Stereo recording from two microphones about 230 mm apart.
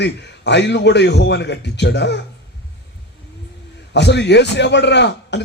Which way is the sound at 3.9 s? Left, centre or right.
Left.